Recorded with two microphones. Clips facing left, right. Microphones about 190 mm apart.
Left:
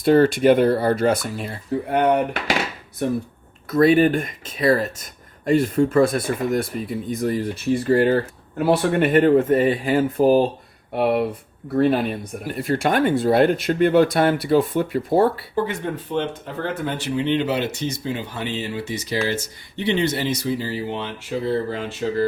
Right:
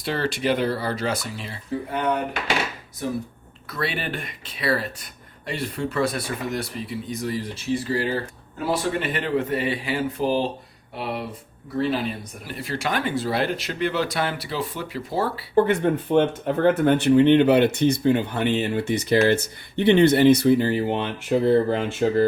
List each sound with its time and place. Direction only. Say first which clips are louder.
0.0 s speech: left 10 dB; 50° left (ahead or behind)
3.7 s speech: left 13 dB; 45° left (ahead or behind)
15.5 s speech: right 5 dB; 60° right (ahead or behind)